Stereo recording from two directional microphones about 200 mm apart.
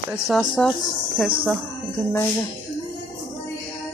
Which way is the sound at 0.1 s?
Centre (ahead or behind).